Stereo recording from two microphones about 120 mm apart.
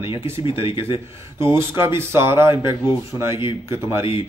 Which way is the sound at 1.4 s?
20° right (ahead or behind).